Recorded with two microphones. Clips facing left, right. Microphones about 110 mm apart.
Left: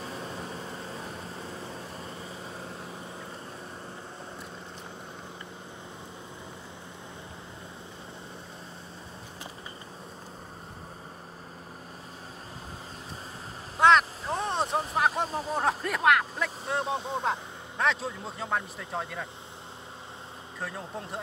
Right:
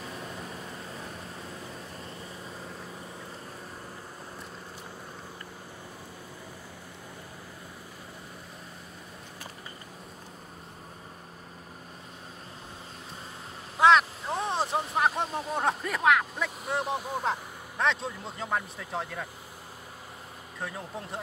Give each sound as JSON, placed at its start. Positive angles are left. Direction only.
{"t": 0.0, "sound": "vehicle", "side_deg": 30}
{"t": 13.7, "sound": "vehicle", "side_deg": 0}
{"t": 15.0, "sound": "a sound", "side_deg": 0}
{"t": 15.2, "sound": "speech", "side_deg": 35}
{"t": 15.5, "sound": "speech", "side_deg": 0}
{"t": 16.8, "sound": "speech", "side_deg": 25}
{"t": 17.2, "sound": "speech", "side_deg": 0}
{"t": 20.6, "sound": "speech", "side_deg": 0}